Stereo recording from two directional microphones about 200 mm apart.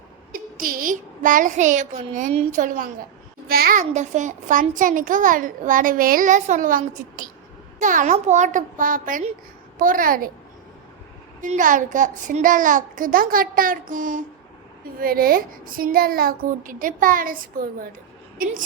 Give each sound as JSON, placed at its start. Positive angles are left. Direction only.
{"t": 0.3, "sound": "a child's voice", "side_deg": -45}
{"t": 11.3, "sound": "a child's voice", "side_deg": -40}